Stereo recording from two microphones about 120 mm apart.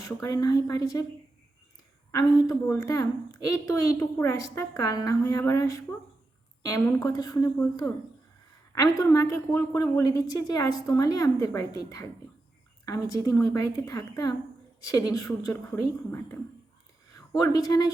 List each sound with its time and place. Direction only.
0.0 s speech: 30° left (ahead or behind)
2.1 s a woman's voice: 25° left (ahead or behind)
17.2 s speech: 30° left (ahead or behind)